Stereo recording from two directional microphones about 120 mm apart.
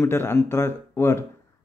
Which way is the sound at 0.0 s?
20° left (ahead or behind).